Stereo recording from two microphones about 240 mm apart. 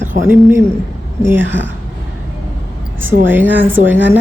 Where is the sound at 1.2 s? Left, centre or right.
Centre.